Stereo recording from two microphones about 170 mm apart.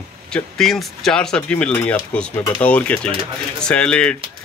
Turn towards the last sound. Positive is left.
turn(degrees=5)  # may be behind; listen again after turning